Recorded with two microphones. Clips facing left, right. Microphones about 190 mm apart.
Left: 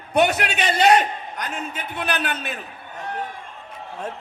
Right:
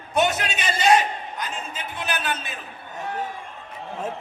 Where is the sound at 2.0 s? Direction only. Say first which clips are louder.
Left 3 dB; 60° left (ahead or behind).